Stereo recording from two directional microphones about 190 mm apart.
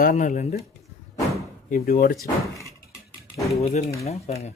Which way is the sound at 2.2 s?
15° left (ahead or behind).